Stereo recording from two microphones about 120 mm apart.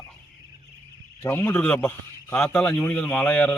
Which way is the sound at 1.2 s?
20° left (ahead or behind).